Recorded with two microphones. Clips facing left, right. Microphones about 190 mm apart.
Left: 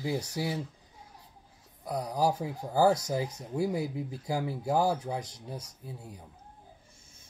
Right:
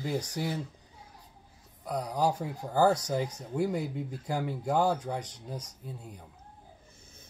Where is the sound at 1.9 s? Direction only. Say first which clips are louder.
Even; 10° left (ahead or behind).